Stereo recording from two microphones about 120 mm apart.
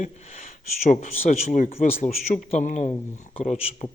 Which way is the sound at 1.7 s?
55° left (ahead or behind).